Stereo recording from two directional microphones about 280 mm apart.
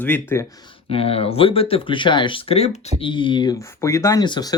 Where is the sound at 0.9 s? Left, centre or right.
Centre.